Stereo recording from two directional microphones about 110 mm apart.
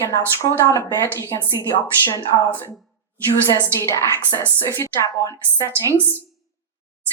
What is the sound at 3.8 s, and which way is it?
Speech, 25° left (ahead or behind).